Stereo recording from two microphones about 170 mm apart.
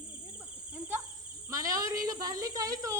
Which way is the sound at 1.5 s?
20° right (ahead or behind).